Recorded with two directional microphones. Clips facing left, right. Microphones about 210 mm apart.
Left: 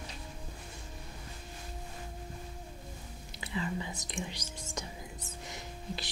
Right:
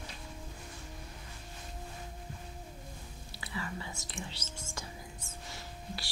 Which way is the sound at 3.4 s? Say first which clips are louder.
Left 5 dB; 20° left (ahead or behind).